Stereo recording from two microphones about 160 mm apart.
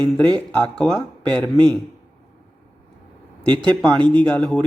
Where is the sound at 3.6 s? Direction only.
5° left (ahead or behind).